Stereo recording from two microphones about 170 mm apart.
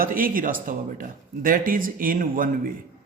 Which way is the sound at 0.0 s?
55° right (ahead or behind).